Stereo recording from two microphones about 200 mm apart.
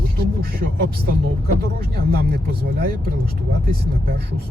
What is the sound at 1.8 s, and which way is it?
Speech, 50° right (ahead or behind).